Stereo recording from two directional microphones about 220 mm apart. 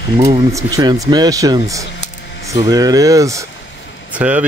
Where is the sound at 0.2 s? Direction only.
15° right (ahead or behind).